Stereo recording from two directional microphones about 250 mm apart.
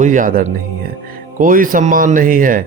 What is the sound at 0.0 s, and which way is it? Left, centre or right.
A man's voice, right.